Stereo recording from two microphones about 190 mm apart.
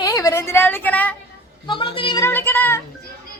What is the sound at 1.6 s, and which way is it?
Speech, 25° left (ahead or behind).